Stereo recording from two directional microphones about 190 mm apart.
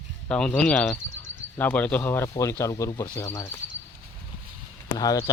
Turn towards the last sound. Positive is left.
turn(degrees=20)  # may be behind; listen again after turning